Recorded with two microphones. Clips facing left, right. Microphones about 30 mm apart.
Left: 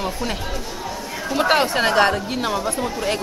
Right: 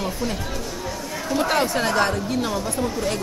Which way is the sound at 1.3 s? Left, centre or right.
Left.